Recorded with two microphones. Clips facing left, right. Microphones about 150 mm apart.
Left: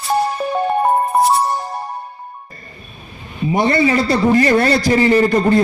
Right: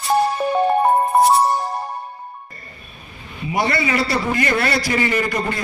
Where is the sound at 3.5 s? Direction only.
35° left (ahead or behind).